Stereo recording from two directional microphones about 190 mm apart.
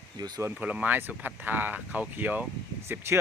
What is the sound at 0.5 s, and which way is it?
Speech, 5° right (ahead or behind).